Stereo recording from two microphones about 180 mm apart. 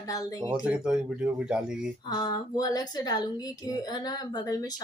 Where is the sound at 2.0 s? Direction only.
25° left (ahead or behind).